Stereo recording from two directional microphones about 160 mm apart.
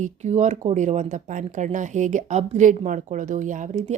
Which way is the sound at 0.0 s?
45° right (ahead or behind).